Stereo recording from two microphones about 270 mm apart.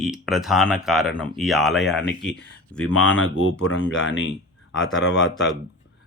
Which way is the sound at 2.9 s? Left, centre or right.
Left.